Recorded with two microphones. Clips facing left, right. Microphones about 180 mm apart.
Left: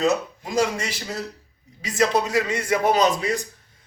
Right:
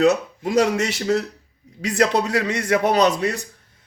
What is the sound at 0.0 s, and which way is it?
A man's voice, 65° right (ahead or behind).